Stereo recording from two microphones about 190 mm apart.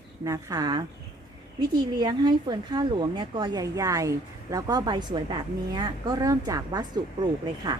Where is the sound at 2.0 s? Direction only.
20° right (ahead or behind).